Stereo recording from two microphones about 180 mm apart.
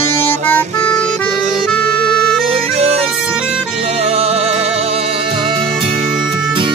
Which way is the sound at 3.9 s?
35° right (ahead or behind).